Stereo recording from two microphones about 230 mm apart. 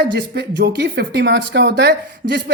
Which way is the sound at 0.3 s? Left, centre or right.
Right.